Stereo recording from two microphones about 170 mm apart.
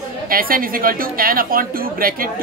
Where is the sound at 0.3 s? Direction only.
60° right (ahead or behind).